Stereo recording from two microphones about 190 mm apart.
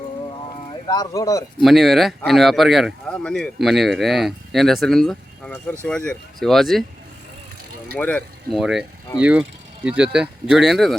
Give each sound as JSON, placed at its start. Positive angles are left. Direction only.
{"t": 0.7, "sound": "speech", "side_deg": 20}
{"t": 1.6, "sound": "speech", "side_deg": 0}
{"t": 7.9, "sound": "speech", "side_deg": 5}